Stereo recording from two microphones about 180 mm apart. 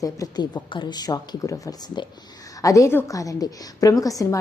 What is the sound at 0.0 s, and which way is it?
A woman's voice, 20° left (ahead or behind).